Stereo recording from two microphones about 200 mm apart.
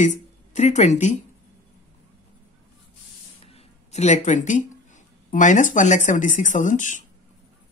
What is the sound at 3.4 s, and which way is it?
Speech, 30° left (ahead or behind).